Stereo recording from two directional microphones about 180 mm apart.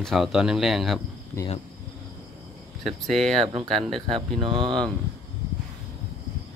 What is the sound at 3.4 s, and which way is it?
Speech, 30° right (ahead or behind).